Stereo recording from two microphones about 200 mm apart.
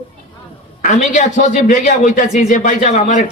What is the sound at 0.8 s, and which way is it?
A man's voice, 40° left (ahead or behind).